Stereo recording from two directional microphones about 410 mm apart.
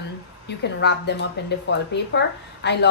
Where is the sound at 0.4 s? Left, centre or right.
Left.